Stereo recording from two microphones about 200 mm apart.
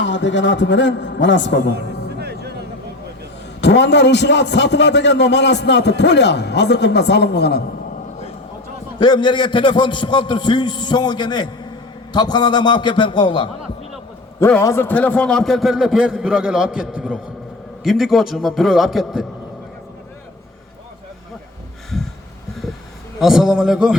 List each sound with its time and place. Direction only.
0.0 s a man's voice: 65° left (ahead or behind)
1.7 s music: 55° right (ahead or behind)
3.6 s a man's voice: 60° left (ahead or behind)
9.0 s a man's voice: 25° left (ahead or behind)
14.3 s a man's voice: 15° left (ahead or behind)
23.2 s a man's voice: centre (ahead or behind)